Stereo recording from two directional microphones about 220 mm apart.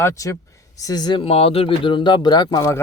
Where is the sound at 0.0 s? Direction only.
15° left (ahead or behind).